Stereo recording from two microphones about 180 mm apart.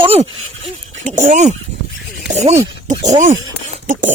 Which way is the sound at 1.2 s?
40° right (ahead or behind).